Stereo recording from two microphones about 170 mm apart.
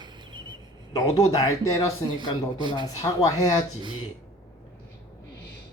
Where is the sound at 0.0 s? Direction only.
25° right (ahead or behind).